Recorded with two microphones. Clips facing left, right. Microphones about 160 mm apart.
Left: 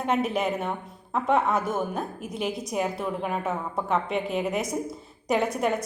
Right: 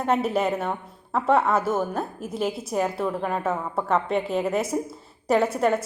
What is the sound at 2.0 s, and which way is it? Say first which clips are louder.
Speech: right 2 dB; 30° right (ahead or behind).